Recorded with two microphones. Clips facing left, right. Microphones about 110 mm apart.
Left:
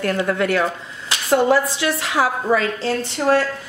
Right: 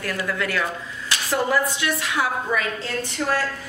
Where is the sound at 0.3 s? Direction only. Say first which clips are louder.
Left 6 dB; 50° left (ahead or behind).